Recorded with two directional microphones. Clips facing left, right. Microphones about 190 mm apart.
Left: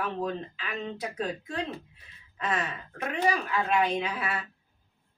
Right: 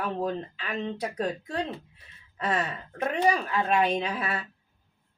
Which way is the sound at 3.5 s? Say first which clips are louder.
Right 2 dB; 30° right (ahead or behind).